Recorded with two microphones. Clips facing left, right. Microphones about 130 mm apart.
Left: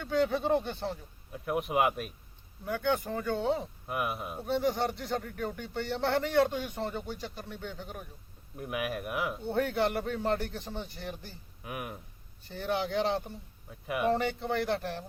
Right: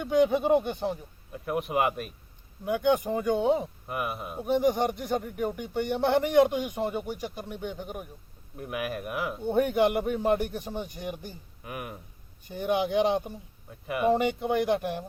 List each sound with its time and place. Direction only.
0.0 s speech: 15° right (ahead or behind)
1.3 s speech: centre (ahead or behind)
2.6 s speech: 15° right (ahead or behind)
3.8 s speech: centre (ahead or behind)
4.4 s speech: 15° right (ahead or behind)
8.5 s speech: centre (ahead or behind)
9.4 s speech: 15° right (ahead or behind)
11.6 s speech: centre (ahead or behind)
12.4 s speech: 15° right (ahead or behind)
13.7 s speech: centre (ahead or behind)
14.1 s speech: 15° right (ahead or behind)